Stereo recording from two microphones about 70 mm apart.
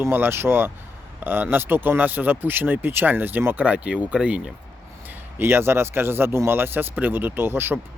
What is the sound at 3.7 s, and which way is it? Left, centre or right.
Speech, centre.